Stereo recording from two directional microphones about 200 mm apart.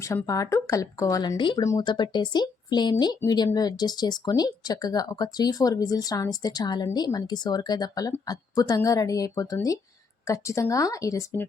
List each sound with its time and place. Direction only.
0.0 s speech: 15° left (ahead or behind)